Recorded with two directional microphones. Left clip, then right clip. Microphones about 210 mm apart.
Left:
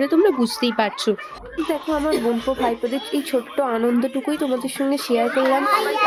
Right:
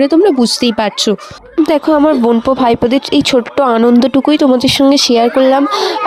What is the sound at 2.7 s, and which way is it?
Speech, 45° right (ahead or behind).